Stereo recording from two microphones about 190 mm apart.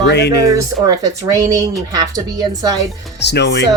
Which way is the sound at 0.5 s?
15° right (ahead or behind).